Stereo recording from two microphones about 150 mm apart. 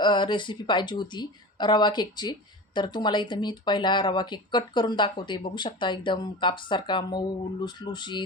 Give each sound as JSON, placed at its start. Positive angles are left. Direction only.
{"t": 0.0, "sound": "speech", "side_deg": 30}